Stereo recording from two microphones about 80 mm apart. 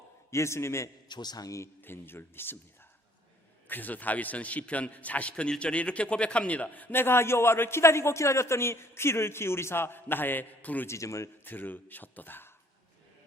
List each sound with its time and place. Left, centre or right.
0.3 s a man's voice: left
1.0 s a man's voice: left
1.8 s a man's voice: left
3.7 s a man's voice: left
10.8 s a man's voice: left
11.4 s a man's voice: left